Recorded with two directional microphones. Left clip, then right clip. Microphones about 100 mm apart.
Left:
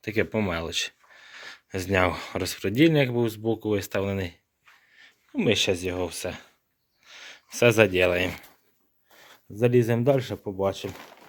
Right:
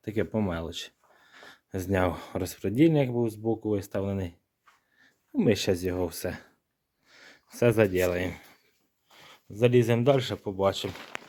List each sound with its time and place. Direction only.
0.0 s speech: 30° right (ahead or behind)
5.4 s speech: 80° right
7.0 s speech: 45° right (ahead or behind); by 8.4 s 15° right (ahead or behind)
9.0 s a sound: 30° left (ahead or behind)
9.5 s speech: 20° left (ahead or behind)
10.3 s speech: 5° left (ahead or behind)